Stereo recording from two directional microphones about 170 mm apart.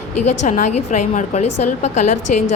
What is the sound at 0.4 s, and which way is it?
A woman's voice, 45° left (ahead or behind).